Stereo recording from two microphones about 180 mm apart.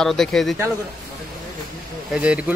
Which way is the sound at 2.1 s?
5° right (ahead or behind).